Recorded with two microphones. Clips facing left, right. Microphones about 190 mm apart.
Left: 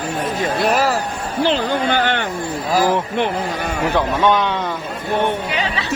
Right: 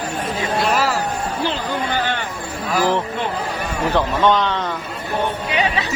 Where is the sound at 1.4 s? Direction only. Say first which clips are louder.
Left 8 dB; 70° left (ahead or behind).